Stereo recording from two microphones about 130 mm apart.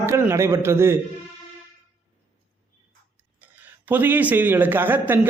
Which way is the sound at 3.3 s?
15° right (ahead or behind).